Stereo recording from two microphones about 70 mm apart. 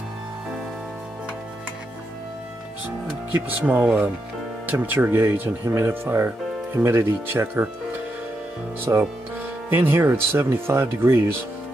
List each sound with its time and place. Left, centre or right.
3.4 s speech: right
8.9 s speech: right
9.7 s speech: right